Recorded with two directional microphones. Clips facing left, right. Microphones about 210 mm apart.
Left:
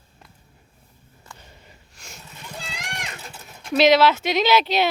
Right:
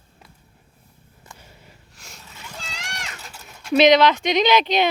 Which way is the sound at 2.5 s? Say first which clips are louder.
Left 2 dB; 15° left (ahead or behind).